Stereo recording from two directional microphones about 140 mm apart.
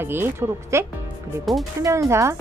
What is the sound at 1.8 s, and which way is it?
Speech, 20° right (ahead or behind).